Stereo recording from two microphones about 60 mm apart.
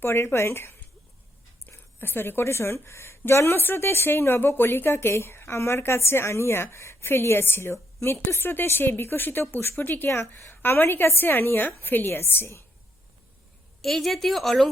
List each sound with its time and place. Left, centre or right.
0.0 s a woman's voice: left
10.1 s a woman's voice: left
13.8 s a woman's voice: centre